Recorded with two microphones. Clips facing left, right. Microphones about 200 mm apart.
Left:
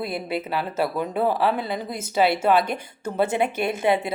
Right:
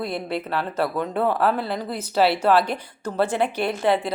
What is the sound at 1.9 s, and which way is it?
Speech, 45° left (ahead or behind).